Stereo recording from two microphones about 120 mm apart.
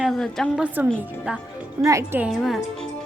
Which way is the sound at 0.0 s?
Centre (ahead or behind).